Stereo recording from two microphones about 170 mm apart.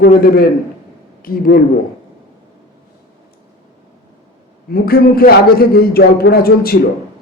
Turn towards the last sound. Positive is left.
turn(degrees=65)  # may be behind; listen again after turning